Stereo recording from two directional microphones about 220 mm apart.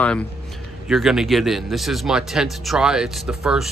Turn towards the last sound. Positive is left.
turn(degrees=0)  # may be behind; listen again after turning